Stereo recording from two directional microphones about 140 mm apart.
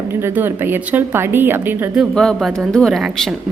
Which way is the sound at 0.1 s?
15° right (ahead or behind).